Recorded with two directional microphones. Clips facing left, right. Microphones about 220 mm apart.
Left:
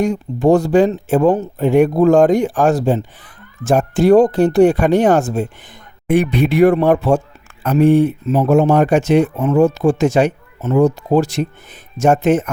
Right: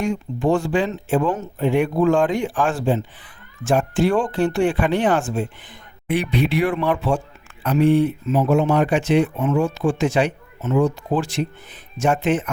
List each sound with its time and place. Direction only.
0.0 s speech: 40° left (ahead or behind)